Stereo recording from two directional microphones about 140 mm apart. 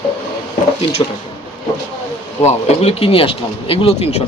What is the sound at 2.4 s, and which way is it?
Speech, 50° left (ahead or behind).